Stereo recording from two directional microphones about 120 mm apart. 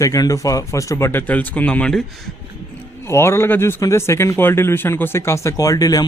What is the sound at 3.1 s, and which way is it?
Speech, 20° left (ahead or behind).